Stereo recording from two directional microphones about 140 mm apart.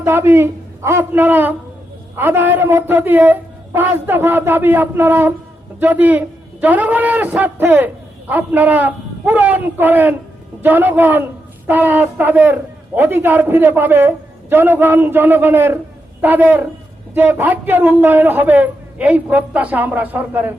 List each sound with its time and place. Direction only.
0.0 s a man's voice: 15° right (ahead or behind)